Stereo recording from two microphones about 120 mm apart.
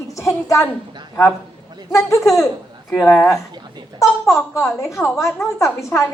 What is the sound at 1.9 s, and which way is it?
Speech, 25° left (ahead or behind).